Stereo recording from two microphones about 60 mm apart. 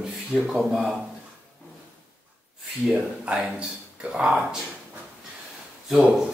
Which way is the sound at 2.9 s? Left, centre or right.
Centre.